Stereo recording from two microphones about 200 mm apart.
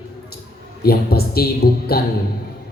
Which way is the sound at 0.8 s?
50° left (ahead or behind).